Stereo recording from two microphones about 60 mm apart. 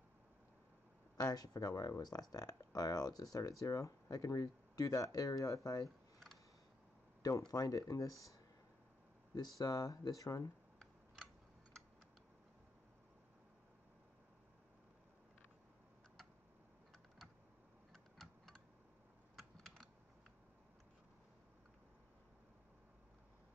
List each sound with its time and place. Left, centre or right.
1.1 s speech: left
7.5 s speech: left
9.3 s speech: left
17.9 s typing: centre
19.5 s computer keyboard: centre